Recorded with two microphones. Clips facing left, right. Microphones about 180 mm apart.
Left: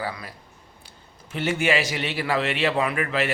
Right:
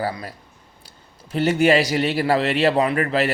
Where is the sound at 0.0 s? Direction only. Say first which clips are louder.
Right 5 dB; 40° right (ahead or behind).